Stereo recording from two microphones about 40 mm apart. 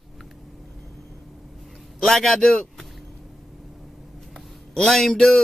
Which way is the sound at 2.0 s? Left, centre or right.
Centre.